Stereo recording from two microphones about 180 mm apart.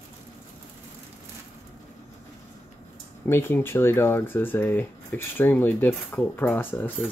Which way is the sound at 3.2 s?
10° left (ahead or behind).